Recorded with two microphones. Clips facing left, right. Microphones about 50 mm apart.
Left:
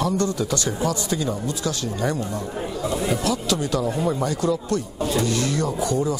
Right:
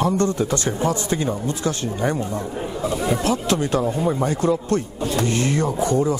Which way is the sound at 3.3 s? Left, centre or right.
Right.